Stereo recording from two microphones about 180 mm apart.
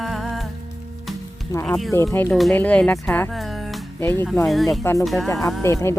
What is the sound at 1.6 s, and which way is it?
Speech, centre (ahead or behind).